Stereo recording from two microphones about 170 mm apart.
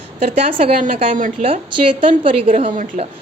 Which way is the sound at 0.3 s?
35° right (ahead or behind).